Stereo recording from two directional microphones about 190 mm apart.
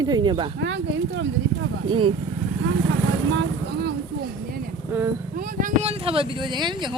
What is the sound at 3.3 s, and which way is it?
Speech, 60° right (ahead or behind).